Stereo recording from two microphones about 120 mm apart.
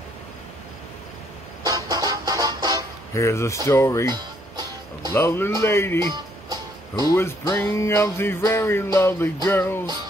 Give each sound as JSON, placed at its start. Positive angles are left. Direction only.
{"t": 1.7, "sound": "music", "side_deg": -35}
{"t": 3.2, "sound": "music", "side_deg": 25}
{"t": 4.1, "sound": "music", "side_deg": -35}
{"t": 5.1, "sound": "music", "side_deg": 20}
{"t": 7.1, "sound": "music", "side_deg": 20}